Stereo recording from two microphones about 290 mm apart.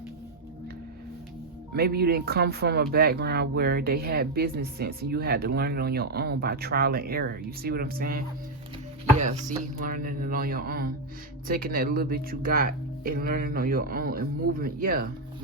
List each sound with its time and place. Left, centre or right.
1.7 s speech: right
9.8 s speech: right